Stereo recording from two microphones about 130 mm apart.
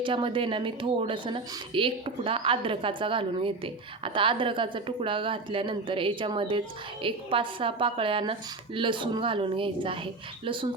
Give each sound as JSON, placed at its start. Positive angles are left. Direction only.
{"t": 0.0, "sound": "a woman's voice", "side_deg": -40}